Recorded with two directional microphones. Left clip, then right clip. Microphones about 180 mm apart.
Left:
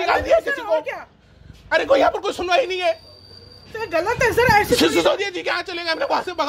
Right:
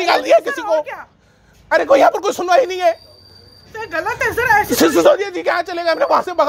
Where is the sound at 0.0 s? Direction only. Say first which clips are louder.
Right 4 dB; 65° right (ahead or behind).